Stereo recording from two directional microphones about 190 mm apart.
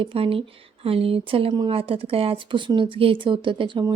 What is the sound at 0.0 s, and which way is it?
Speech, 30° right (ahead or behind).